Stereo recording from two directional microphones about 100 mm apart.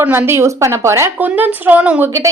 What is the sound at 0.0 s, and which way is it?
A woman's voice, 25° right (ahead or behind).